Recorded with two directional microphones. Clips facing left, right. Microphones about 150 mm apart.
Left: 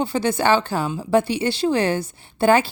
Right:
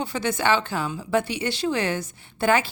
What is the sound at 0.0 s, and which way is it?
A woman's voice, 30° left (ahead or behind).